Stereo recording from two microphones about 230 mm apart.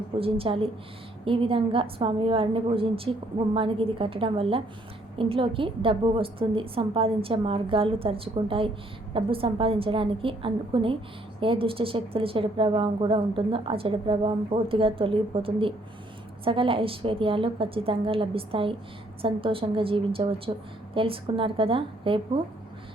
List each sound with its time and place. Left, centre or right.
0.2 s a woman's voice: right